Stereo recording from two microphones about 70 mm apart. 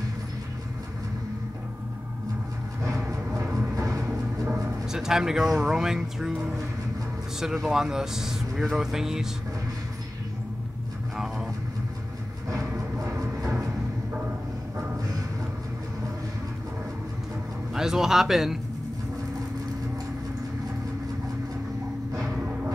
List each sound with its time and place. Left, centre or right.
2.8 s vehicle: right
3.7 s music: right
4.9 s speech: centre
11.1 s vehicle: centre
12.4 s music: right
17.7 s speech: centre